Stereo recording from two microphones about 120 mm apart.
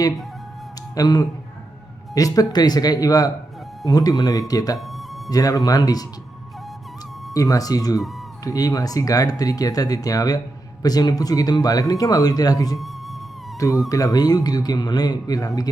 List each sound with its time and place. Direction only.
0.9 s speech: 30° left (ahead or behind)
7.3 s speech: 30° left (ahead or behind)
13.9 s speech: 30° left (ahead or behind)